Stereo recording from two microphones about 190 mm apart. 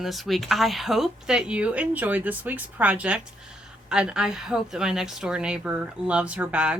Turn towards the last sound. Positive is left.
turn(degrees=-5)  # may be behind; listen again after turning